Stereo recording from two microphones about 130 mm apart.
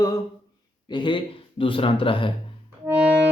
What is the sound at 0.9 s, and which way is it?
A man's voice, 35° left (ahead or behind).